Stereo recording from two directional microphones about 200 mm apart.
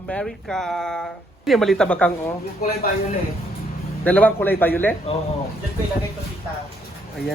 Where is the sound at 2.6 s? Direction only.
50° left (ahead or behind).